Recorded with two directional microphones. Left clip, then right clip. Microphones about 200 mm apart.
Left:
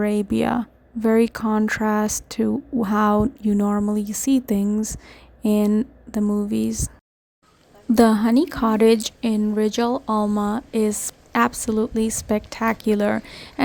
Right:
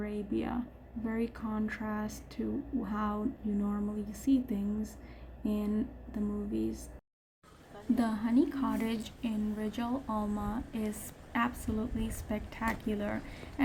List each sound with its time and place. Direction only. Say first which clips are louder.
0.0 s a woman's voice: left 15 dB; 50° left (ahead or behind)
7.9 s a woman's voice: left 15 dB; 50° left (ahead or behind)